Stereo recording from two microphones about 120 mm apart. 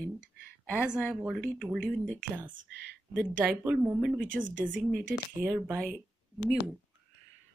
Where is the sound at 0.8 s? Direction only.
10° right (ahead or behind).